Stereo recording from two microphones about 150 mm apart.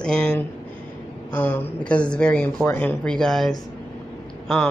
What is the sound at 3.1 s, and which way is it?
Speech, 5° left (ahead or behind).